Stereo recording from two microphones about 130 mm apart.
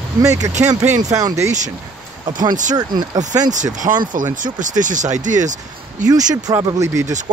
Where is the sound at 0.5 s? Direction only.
65° right (ahead or behind).